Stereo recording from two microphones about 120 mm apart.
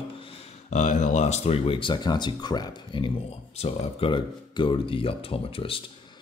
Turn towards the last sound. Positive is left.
turn(degrees=50)  # may be behind; listen again after turning